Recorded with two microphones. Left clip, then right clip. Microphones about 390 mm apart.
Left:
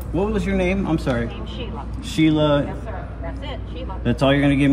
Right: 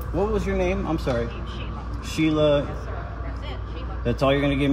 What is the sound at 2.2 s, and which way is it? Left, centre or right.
Speech, left.